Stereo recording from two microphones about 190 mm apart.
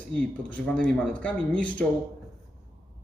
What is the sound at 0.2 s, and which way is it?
Speech, 5° left (ahead or behind).